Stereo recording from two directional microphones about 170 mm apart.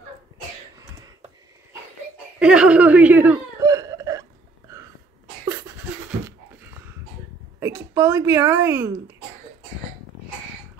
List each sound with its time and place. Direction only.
2.3 s speech: 5° right (ahead or behind)
3.6 s cough: 20° right (ahead or behind)
6.2 s dog: 15° right (ahead or behind)
7.6 s speech: 15° right (ahead or behind)